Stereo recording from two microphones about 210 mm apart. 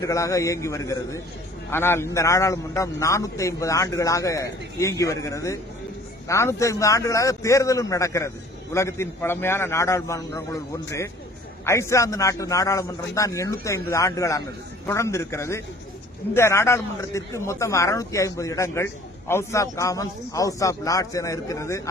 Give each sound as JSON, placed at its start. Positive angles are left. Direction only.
{"t": 0.0, "sound": "a man's voice", "side_deg": 15}